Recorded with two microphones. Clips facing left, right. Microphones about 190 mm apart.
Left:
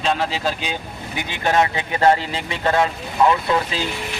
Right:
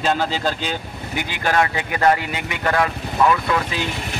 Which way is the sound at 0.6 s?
20° left (ahead or behind).